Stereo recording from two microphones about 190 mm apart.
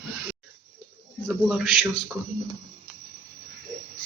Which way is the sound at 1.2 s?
5° right (ahead or behind).